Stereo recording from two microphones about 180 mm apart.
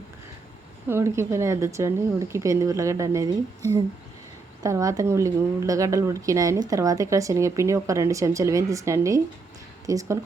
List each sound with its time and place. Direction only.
0.9 s speech: 15° right (ahead or behind)